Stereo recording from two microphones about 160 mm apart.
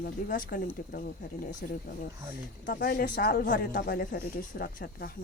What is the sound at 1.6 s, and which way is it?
Speech, 80° left.